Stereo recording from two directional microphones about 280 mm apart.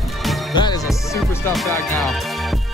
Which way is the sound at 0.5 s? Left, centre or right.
Centre.